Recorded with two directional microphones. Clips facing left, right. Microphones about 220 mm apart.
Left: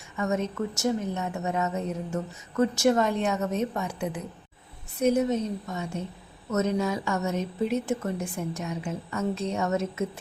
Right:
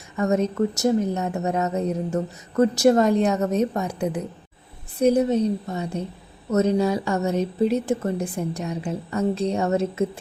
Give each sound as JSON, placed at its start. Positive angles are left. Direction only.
{"t": 0.2, "sound": "a woman's voice", "side_deg": -40}